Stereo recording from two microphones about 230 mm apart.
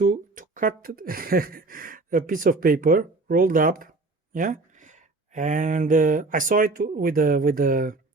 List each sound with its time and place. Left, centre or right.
0.0 s speech: right